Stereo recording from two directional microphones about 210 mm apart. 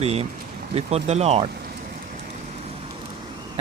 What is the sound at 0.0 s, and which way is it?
Speech, 30° right (ahead or behind).